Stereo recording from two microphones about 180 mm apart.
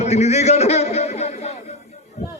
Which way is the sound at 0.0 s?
35° left (ahead or behind).